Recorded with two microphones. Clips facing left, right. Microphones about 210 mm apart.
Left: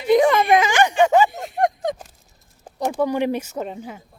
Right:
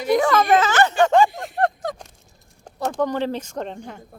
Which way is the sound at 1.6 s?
20° left (ahead or behind).